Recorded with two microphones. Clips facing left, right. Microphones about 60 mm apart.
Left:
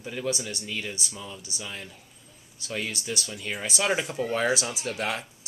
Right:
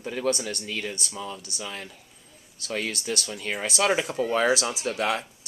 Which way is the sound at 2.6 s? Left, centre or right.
Right.